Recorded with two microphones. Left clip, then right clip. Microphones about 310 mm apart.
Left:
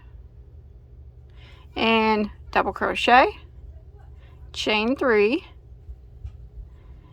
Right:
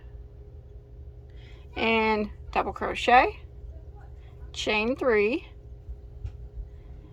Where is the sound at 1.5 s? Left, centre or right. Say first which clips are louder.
Left 4 dB; centre.